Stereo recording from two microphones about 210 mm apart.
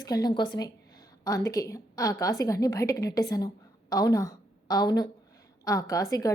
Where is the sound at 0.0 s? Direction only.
20° left (ahead or behind).